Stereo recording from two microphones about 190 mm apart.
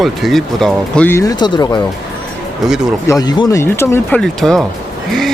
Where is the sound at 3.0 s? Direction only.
20° left (ahead or behind); by 4.6 s 5° left (ahead or behind).